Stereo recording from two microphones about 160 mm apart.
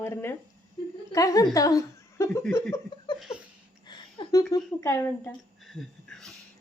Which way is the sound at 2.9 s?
30° left (ahead or behind).